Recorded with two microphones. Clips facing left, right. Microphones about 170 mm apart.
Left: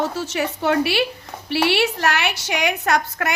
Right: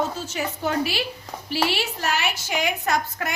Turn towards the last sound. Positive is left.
turn(degrees=70)  # may be behind; listen again after turning